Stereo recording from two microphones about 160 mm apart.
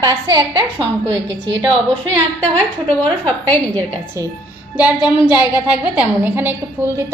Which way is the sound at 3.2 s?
10° left (ahead or behind).